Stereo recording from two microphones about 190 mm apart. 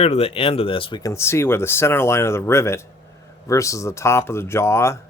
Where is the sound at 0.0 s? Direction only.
30° left (ahead or behind).